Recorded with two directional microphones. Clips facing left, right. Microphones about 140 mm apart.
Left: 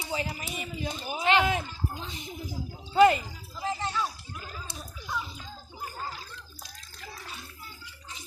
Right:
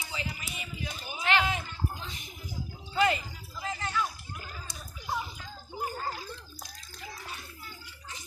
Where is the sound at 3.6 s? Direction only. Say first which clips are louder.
Left 2 dB; 30° left (ahead or behind).